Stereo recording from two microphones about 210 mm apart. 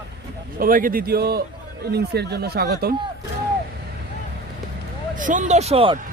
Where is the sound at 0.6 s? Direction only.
40° right (ahead or behind).